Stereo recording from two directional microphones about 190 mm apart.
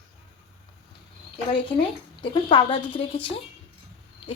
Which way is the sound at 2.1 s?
25° left (ahead or behind).